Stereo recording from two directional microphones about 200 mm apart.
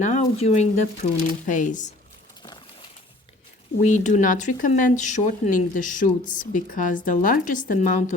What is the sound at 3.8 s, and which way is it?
A woman's voice, 40° left (ahead or behind).